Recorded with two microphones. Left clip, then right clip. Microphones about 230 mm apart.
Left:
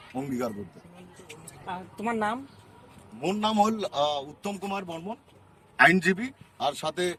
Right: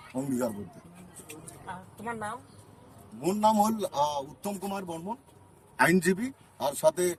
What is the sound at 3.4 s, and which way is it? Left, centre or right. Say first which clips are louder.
A man's voice: right 1 dB; centre.